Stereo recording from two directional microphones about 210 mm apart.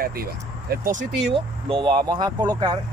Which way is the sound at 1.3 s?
25° right (ahead or behind).